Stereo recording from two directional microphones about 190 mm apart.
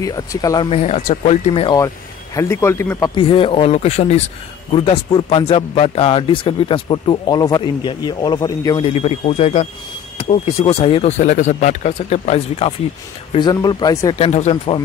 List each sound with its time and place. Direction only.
0.0 s speech: 20° left (ahead or behind)
0.7 s speech: 35° left (ahead or behind)
2.3 s a man's voice: 15° left (ahead or behind)
3.2 s speech: 30° left (ahead or behind)
13.3 s speech: 20° left (ahead or behind)
14.1 s speech: 35° left (ahead or behind)